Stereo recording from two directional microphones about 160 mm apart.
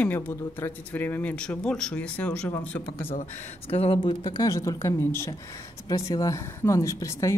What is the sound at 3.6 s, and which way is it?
A woman's voice, 40° left (ahead or behind).